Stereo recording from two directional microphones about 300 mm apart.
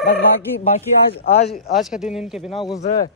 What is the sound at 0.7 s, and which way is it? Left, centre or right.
Speech, left.